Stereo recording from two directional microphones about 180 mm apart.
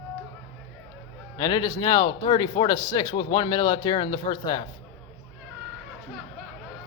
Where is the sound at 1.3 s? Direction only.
25° left (ahead or behind).